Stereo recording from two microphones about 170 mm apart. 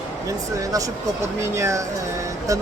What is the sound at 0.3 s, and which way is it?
Speech, 20° right (ahead or behind).